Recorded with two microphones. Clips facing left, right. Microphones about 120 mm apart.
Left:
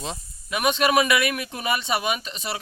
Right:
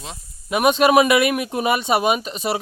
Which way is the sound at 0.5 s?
45° right (ahead or behind).